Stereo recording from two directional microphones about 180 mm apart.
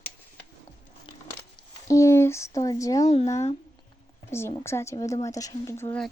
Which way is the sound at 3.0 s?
35° left (ahead or behind).